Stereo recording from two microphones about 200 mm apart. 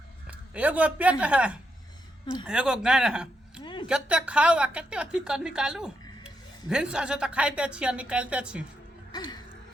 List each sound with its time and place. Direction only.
0.3 s a man's voice: 5° right (ahead or behind)
3.6 s a sound: 25° left (ahead or behind)
3.8 s a woman's voice: 5° right (ahead or behind)
9.1 s music: 20° left (ahead or behind)